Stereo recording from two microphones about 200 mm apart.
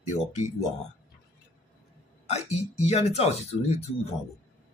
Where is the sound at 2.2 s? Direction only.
35° left (ahead or behind).